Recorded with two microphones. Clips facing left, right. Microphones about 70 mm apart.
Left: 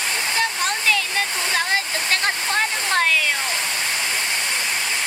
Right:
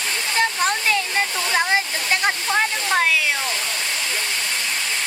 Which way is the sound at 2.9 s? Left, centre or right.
Centre.